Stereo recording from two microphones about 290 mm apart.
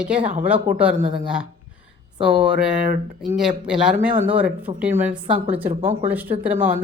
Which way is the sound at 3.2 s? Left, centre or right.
Centre.